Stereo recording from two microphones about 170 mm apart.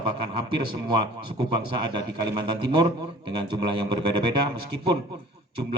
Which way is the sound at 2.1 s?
25° right (ahead or behind).